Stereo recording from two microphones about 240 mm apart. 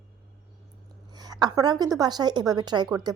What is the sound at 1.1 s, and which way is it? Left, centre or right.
A woman's voice, centre.